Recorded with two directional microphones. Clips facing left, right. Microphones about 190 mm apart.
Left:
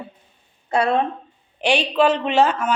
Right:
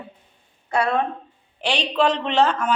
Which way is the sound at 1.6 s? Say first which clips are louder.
Left 3 dB; 10° left (ahead or behind).